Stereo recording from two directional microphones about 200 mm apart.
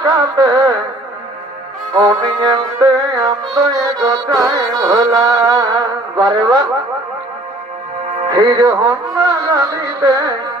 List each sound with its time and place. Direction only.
0.0 s music: 15° right (ahead or behind)
2.0 s music: 15° right (ahead or behind)
8.4 s music: 15° right (ahead or behind)